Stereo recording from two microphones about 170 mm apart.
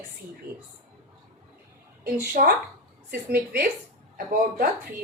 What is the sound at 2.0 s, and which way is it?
A woman's voice, 55° right (ahead or behind).